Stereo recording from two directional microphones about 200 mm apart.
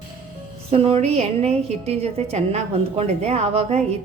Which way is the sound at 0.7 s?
30° right (ahead or behind).